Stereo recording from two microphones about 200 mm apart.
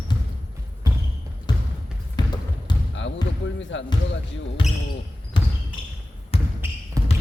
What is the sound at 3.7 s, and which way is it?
Music, 70° left (ahead or behind).